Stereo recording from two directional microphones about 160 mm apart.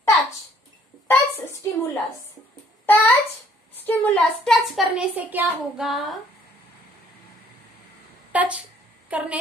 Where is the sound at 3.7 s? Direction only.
10° left (ahead or behind).